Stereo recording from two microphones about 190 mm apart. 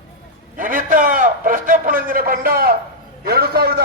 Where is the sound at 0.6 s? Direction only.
45° right (ahead or behind).